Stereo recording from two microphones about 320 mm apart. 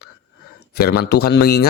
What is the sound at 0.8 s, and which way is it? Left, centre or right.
Speech, left.